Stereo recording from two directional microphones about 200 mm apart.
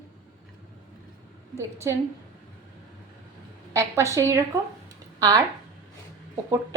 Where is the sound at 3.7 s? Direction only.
15° right (ahead or behind).